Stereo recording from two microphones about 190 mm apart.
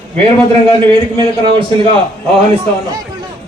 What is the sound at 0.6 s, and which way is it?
A man's voice, 30° right (ahead or behind).